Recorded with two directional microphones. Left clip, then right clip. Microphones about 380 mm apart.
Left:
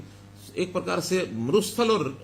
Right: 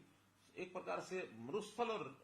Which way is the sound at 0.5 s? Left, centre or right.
Left.